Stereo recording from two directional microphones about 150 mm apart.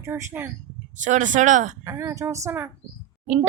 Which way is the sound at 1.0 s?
55° right (ahead or behind).